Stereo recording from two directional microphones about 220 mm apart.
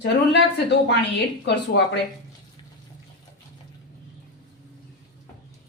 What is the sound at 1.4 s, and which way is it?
Speech, 50° left (ahead or behind).